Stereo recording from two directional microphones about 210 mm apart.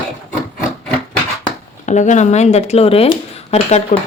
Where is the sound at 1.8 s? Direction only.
35° left (ahead or behind).